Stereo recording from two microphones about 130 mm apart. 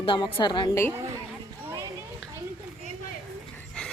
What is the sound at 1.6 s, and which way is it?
Children playing, 20° right (ahead or behind).